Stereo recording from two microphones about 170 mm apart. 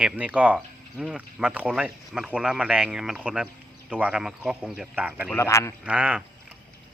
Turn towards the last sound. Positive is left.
turn(degrees=-5)  # may be behind; listen again after turning